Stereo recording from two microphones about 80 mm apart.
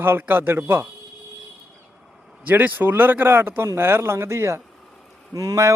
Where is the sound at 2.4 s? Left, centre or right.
Right.